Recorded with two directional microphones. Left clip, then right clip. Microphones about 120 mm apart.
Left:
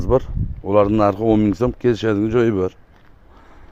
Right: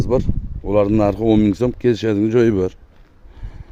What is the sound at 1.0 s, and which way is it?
Speech, 90° right.